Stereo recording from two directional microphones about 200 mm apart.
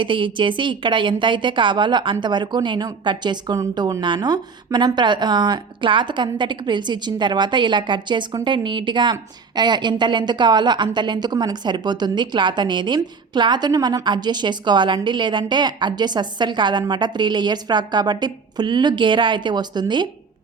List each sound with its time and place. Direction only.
0.0 s a woman's voice: 25° right (ahead or behind)